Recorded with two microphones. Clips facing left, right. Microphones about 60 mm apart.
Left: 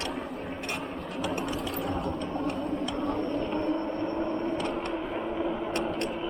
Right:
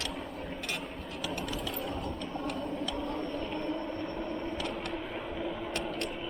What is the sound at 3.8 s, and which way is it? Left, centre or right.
Vehicle, left.